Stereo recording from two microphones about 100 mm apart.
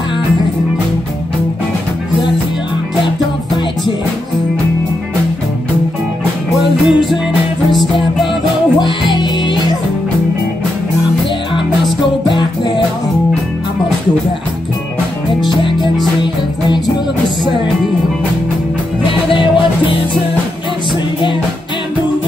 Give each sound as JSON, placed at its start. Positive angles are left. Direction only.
{"t": 6.6, "sound": "music", "side_deg": 0}
{"t": 12.4, "sound": "music", "side_deg": 50}
{"t": 15.4, "sound": "music", "side_deg": 50}
{"t": 19.3, "sound": "music", "side_deg": 55}